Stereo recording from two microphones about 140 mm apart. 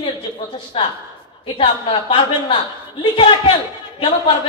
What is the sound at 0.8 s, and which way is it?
A woman's voice, 35° left (ahead or behind).